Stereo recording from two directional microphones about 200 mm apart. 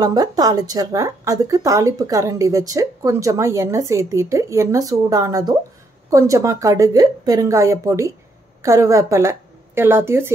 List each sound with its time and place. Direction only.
0.0 s speech: 20° right (ahead or behind)